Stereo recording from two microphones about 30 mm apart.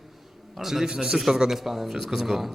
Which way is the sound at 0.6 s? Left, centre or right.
Centre.